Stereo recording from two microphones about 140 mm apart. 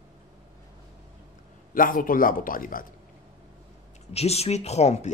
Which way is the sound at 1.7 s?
80° left.